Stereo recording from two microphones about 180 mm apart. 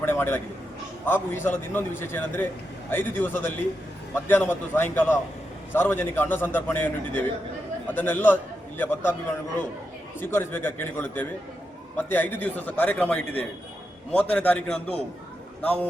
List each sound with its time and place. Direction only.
0.0 s a sound: 10° left (ahead or behind)
1.0 s a man's voice: 10° left (ahead or behind)
10.2 s a man's voice: 10° left (ahead or behind)